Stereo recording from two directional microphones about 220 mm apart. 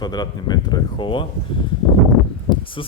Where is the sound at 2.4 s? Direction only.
25° left (ahead or behind).